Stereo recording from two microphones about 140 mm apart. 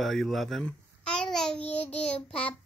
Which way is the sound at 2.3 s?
10° left (ahead or behind).